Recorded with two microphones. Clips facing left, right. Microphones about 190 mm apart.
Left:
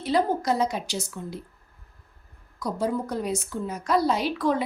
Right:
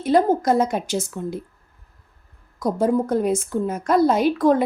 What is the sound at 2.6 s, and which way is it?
A woman's voice, 50° right (ahead or behind).